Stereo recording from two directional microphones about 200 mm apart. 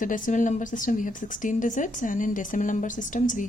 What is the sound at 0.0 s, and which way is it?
A woman's voice, 40° left (ahead or behind).